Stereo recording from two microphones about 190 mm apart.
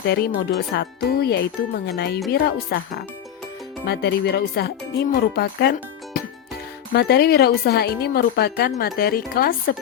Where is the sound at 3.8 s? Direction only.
60° left (ahead or behind).